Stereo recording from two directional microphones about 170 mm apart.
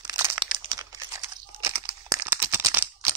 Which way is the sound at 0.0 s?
15° right (ahead or behind).